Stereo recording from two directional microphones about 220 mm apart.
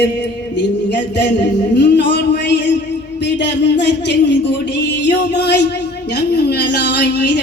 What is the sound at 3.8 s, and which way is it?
Music, 50° left (ahead or behind).